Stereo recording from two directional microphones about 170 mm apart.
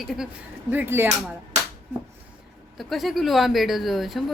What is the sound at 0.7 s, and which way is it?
Speech, 10° right (ahead or behind).